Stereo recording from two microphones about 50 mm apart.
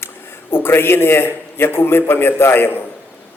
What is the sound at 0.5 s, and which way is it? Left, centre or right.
A man's voice, left.